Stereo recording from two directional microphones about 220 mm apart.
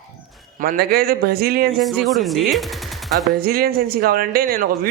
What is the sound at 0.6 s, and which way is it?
Speech, 45° right (ahead or behind).